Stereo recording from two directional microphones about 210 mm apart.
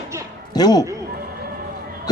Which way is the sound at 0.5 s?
20° left (ahead or behind).